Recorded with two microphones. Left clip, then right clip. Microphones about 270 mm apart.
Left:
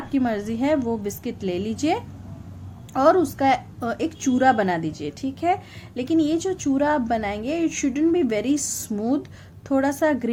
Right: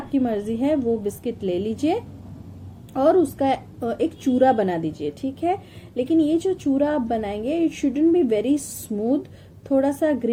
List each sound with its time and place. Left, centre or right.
0.1 s a woman's voice: left
9.6 s a woman's voice: left